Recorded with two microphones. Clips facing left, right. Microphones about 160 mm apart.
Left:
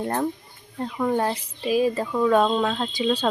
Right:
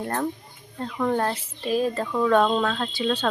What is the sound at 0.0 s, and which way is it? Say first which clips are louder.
A woman's voice: left 2 dB; 20° left (ahead or behind).